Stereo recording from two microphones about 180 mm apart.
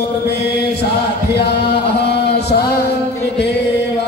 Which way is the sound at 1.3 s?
70° left (ahead or behind).